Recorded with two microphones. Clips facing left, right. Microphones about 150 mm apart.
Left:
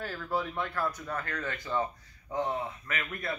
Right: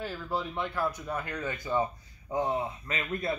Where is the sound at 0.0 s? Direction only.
10° right (ahead or behind).